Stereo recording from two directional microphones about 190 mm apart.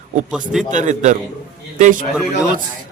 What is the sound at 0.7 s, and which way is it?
A man's voice, 40° right (ahead or behind).